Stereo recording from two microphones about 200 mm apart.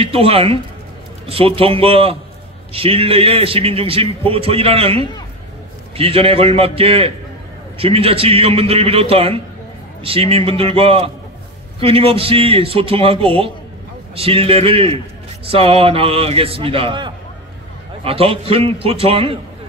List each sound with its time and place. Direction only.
0.0 s a man's voice: 30° right (ahead or behind)